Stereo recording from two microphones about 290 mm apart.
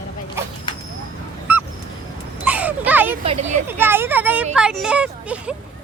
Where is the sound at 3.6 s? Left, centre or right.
Centre.